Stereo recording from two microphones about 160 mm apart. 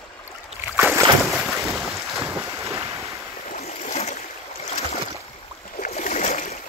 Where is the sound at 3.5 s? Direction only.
45° left (ahead or behind).